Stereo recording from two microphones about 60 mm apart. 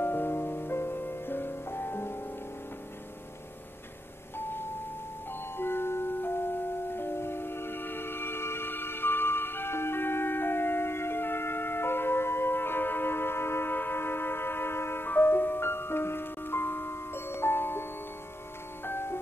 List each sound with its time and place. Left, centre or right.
0.0 s music: left
4.4 s a sound: left
5.6 s music: left
18.9 s music: left